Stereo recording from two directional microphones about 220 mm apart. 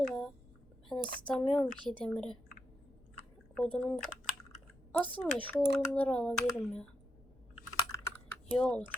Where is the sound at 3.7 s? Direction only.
5° left (ahead or behind).